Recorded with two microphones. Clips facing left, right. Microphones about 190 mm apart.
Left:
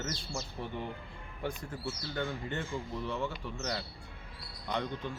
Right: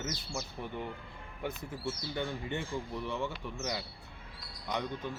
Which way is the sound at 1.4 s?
5° right (ahead or behind).